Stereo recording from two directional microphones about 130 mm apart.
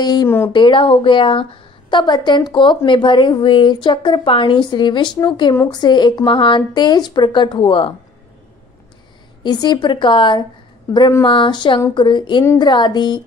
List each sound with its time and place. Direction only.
0.0 s speech: 30° left (ahead or behind)
9.4 s speech: 35° left (ahead or behind)